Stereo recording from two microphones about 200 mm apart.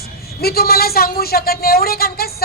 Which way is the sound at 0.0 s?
50° left (ahead or behind).